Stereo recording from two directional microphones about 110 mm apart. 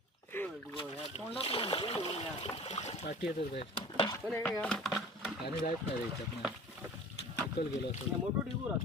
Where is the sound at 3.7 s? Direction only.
50° left (ahead or behind).